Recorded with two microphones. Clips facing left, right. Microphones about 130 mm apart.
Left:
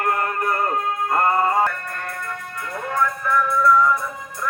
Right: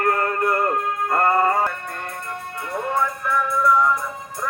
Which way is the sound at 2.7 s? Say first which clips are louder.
Even; 25° right (ahead or behind).